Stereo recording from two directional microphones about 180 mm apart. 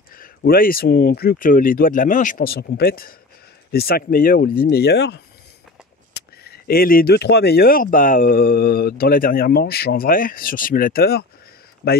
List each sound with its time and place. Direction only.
0.1 s speech: 55° left (ahead or behind)
6.4 s speech: 55° left (ahead or behind)